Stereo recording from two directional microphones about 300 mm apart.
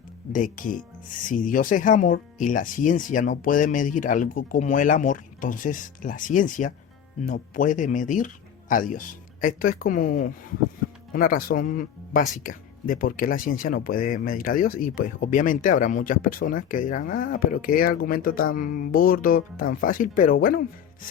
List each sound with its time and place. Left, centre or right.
0.3 s speech: left